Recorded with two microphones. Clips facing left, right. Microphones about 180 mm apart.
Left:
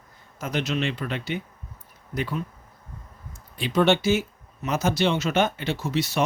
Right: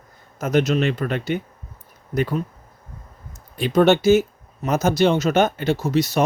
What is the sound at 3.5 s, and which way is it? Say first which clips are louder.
Speech: right 5 dB; 45° right (ahead or behind).